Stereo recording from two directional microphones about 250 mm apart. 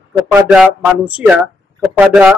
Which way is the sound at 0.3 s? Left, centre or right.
Centre.